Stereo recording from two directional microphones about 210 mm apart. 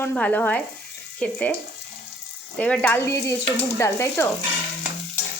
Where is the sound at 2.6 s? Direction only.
5° left (ahead or behind).